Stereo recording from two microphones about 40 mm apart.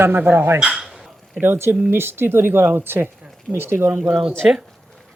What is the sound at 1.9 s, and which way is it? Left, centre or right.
Speech, right.